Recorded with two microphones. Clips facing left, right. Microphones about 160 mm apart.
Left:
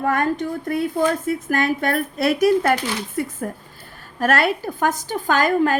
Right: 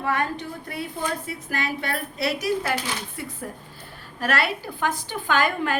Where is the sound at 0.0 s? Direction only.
45° left (ahead or behind).